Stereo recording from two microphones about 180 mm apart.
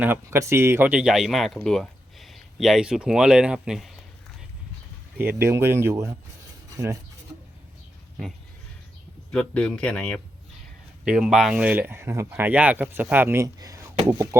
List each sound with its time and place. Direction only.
0.0 s speech: 15° right (ahead or behind)
5.4 s speech: 15° right (ahead or behind)
9.3 s speech: 5° left (ahead or behind)
11.0 s speech: 5° right (ahead or behind)